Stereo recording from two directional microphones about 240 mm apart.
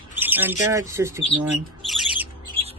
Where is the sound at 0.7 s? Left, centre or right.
Centre.